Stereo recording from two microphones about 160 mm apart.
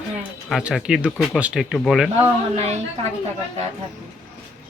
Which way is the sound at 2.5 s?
45° right (ahead or behind).